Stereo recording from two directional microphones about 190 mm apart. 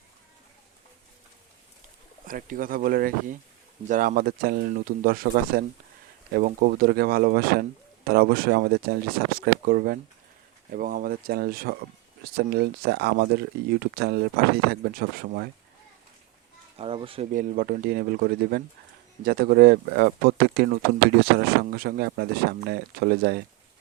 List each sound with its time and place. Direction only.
2.2 s speech: 45° right (ahead or behind)
16.7 s speech: 30° right (ahead or behind)
17.3 s speech: 50° right (ahead or behind)